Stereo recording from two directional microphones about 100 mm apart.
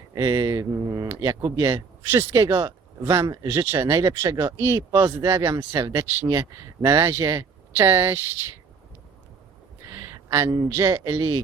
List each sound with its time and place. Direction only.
0.1 s speech: 40° right (ahead or behind)
7.8 s speech: 25° right (ahead or behind)
10.2 s a man's voice: 30° right (ahead or behind)